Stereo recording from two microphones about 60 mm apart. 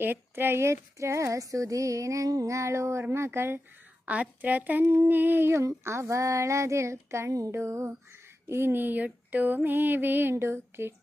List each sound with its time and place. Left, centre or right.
0.0 s speech: right
4.0 s a woman's voice: right
5.8 s speech: right
8.4 s speech: right